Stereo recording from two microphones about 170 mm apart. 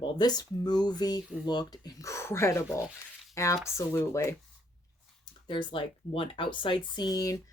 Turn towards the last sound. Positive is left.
turn(degrees=20)  # may be behind; listen again after turning